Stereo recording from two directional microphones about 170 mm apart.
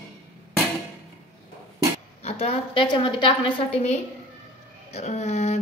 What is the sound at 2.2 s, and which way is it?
A woman's voice, 35° left (ahead or behind).